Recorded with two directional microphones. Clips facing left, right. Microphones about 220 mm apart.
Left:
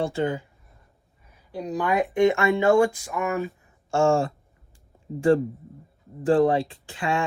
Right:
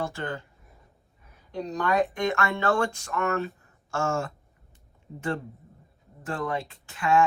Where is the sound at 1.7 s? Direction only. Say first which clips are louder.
Left 2 dB; 10° left (ahead or behind).